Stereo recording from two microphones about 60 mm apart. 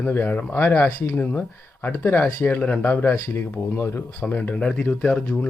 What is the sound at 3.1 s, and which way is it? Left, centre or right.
Speech, left.